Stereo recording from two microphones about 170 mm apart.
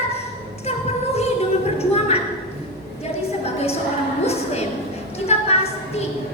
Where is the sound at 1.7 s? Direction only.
35° left (ahead or behind).